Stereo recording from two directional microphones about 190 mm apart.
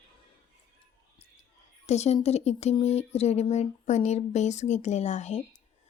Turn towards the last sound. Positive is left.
turn(degrees=35)  # may be behind; listen again after turning